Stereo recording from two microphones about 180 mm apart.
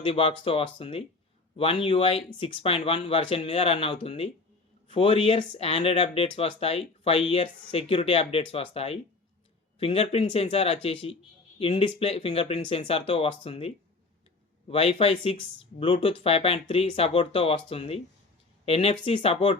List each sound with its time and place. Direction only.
0.0 s speech: 30° left (ahead or behind)